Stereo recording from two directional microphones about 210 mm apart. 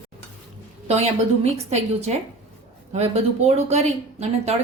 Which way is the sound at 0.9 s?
30° right (ahead or behind).